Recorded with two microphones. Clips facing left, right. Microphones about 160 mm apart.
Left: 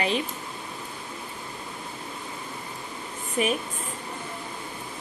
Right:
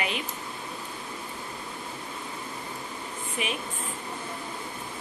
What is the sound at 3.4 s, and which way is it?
Speech, 45° left (ahead or behind).